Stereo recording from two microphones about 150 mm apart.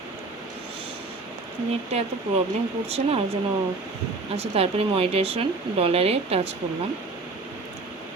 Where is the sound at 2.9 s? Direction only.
40° right (ahead or behind).